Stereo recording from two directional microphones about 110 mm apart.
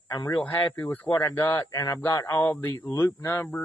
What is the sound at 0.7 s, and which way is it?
Speech, 15° left (ahead or behind).